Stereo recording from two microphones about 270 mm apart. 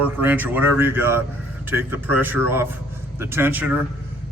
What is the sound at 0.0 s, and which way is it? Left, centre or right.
Speech, centre.